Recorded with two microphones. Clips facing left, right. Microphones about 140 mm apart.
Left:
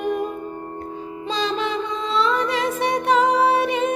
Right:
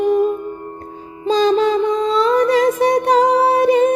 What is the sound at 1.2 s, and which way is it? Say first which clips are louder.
Music: right 10 dB; 40° right (ahead or behind).